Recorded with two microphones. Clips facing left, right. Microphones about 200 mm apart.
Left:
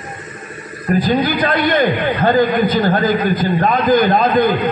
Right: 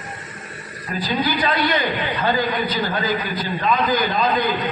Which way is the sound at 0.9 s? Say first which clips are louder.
Left 7 dB; 50° left (ahead or behind).